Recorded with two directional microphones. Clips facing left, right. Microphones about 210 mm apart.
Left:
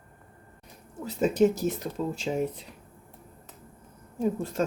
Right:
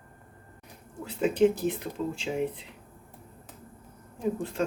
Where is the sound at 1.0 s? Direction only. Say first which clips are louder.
Left 1 dB; 40° left (ahead or behind).